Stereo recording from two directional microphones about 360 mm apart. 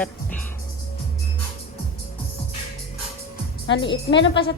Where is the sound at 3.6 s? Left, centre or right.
Left.